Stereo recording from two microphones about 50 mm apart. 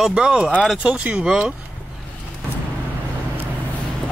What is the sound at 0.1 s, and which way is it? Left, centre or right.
Speech, centre.